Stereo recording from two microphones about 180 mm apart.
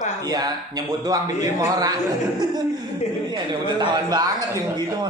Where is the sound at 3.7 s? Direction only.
25° right (ahead or behind).